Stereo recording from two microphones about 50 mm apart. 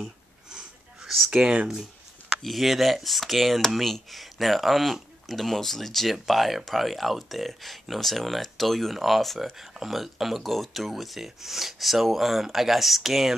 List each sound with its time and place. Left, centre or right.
1.0 s a sound: centre
1.3 s speech: centre
2.4 s speech: centre